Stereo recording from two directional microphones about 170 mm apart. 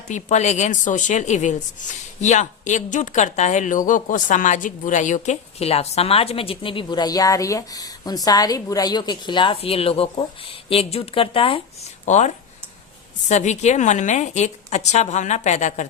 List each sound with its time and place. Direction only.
0.1 s a woman's voice: 45° left (ahead or behind)
12.0 s a woman's voice: 45° left (ahead or behind)